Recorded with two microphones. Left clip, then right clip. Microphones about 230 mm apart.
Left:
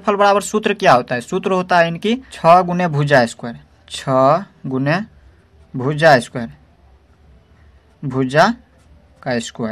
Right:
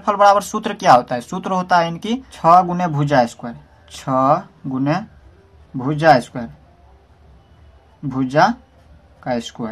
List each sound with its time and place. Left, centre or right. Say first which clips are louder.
0.0 s speech: right 1 dB; left
8.0 s speech: left 1 dB; left